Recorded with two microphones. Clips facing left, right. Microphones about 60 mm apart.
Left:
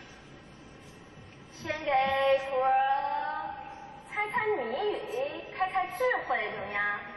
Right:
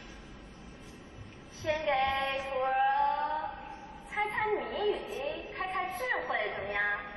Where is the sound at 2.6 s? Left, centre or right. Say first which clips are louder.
Even; centre.